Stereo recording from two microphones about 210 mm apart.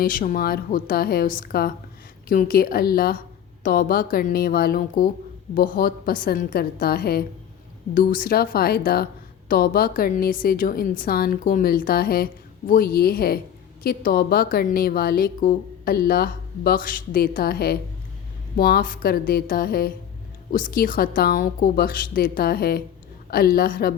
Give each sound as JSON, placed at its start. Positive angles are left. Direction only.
{"t": 0.0, "sound": "a woman's voice", "side_deg": 40}